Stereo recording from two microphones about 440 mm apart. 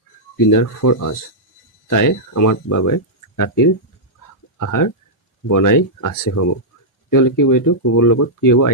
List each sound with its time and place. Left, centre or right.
0.3 s speech: left